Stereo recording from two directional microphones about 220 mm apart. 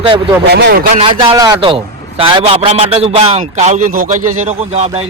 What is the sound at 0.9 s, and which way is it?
A man's voice, 25° right (ahead or behind).